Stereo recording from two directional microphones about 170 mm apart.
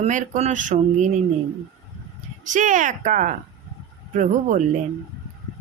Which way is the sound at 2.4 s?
50° right (ahead or behind).